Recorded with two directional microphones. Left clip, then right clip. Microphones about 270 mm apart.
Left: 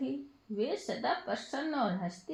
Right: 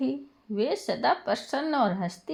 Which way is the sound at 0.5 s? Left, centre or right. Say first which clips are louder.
Right 7 dB; right.